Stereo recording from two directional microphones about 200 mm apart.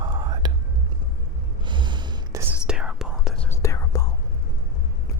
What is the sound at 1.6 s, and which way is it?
Gasp, 25° right (ahead or behind).